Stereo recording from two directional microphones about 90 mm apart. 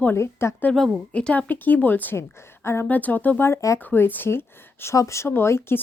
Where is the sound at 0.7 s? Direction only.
Centre (ahead or behind).